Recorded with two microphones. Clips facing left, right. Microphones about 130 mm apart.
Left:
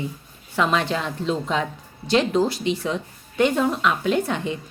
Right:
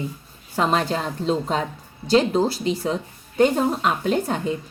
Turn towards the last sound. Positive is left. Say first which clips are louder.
# even
turn(degrees=-40)  # may be behind; listen again after turning